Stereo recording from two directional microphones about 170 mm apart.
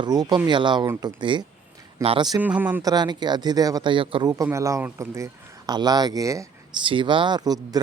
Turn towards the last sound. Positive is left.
turn(degrees=-20)  # may be behind; listen again after turning